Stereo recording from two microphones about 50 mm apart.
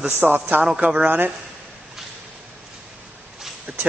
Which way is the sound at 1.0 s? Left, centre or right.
Right.